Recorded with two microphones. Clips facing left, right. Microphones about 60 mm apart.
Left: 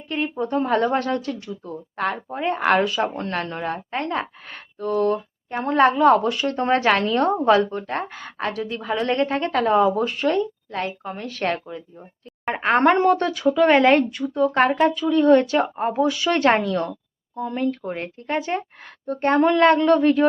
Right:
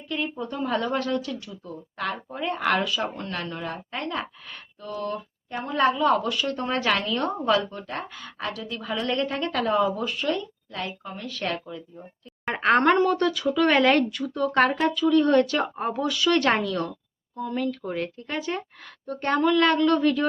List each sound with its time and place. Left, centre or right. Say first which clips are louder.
0.1 s speech: left 6 dB; left
12.5 s speech: even; centre
12.8 s speech: left 3 dB; left
13.5 s a woman's voice: left 5 dB; left